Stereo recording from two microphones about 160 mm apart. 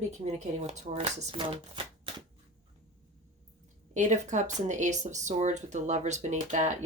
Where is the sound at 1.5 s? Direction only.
35° right (ahead or behind).